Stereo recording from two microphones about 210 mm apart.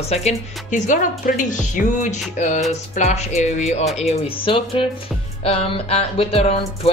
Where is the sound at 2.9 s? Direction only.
35° left (ahead or behind).